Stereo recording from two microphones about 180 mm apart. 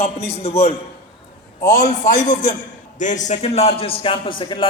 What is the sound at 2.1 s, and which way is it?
A man's voice, 45° left (ahead or behind).